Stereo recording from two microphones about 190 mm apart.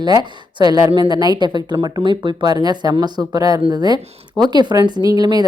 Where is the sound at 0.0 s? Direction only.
20° right (ahead or behind).